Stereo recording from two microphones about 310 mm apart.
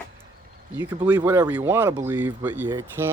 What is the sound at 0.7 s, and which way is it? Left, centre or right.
Speech, centre.